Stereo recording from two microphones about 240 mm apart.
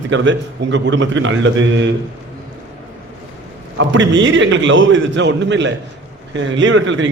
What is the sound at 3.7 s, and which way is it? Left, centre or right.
A man's voice, right.